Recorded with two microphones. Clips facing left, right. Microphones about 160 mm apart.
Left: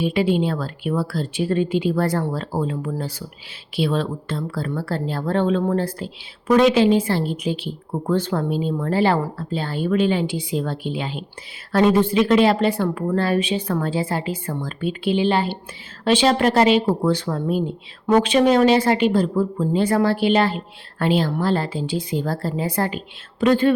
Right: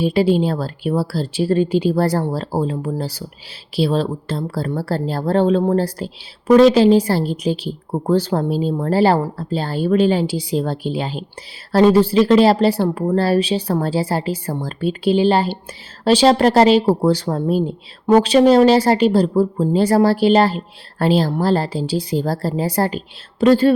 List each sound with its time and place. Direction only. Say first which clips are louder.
0.0 s a woman's voice: right 4 dB; 35° right (ahead or behind)